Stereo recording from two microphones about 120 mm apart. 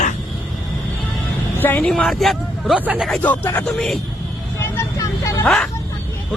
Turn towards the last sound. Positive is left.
turn(degrees=5)  # may be behind; listen again after turning